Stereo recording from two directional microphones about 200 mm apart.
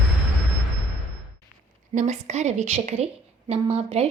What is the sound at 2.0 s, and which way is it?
Speech, 35° right (ahead or behind).